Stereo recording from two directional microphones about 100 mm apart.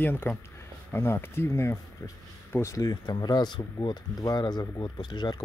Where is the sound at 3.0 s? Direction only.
45° left (ahead or behind).